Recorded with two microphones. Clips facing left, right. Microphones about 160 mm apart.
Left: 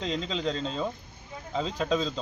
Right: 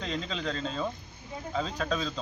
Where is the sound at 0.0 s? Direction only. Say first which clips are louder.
Left 3 dB; 25° left (ahead or behind).